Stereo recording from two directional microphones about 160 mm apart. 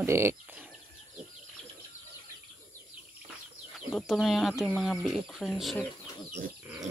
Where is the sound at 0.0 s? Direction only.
15° right (ahead or behind).